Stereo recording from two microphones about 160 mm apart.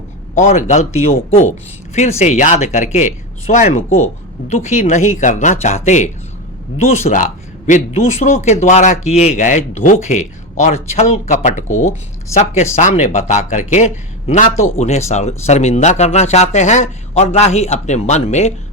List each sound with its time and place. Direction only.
0.3 s speech: 45° left (ahead or behind)